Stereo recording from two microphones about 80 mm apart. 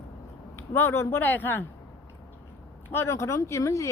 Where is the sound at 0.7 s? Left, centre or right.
Left.